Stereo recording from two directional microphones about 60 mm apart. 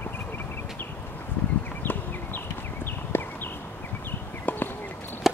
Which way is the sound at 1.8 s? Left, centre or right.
Left.